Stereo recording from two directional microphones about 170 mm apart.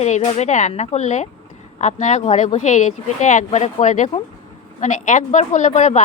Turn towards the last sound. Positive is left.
turn(degrees=45)  # may be behind; listen again after turning